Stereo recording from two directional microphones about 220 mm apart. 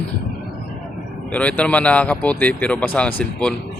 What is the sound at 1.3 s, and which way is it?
Speech, 5° left (ahead or behind).